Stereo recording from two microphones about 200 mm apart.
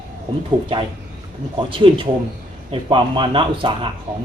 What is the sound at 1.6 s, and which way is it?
Speech, 25° right (ahead or behind).